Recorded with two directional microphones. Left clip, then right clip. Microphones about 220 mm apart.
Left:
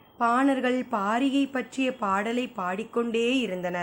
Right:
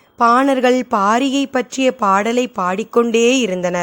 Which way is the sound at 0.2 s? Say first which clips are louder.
Right 11 dB; 45° right (ahead or behind).